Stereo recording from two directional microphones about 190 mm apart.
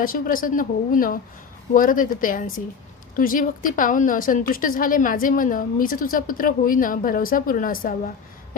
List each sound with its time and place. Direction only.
0.0 s a woman's voice: 45° left (ahead or behind)